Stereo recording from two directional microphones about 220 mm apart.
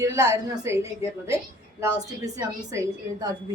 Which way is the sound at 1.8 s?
15° right (ahead or behind).